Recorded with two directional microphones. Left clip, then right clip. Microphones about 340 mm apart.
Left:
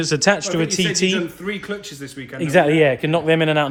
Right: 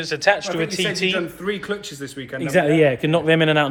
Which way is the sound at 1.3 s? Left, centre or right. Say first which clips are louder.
Right 2 dB; centre.